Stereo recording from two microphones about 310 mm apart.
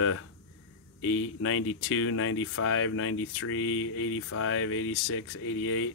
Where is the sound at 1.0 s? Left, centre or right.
Left.